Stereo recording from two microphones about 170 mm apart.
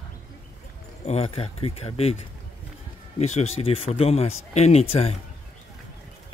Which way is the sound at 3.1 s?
40° left (ahead or behind).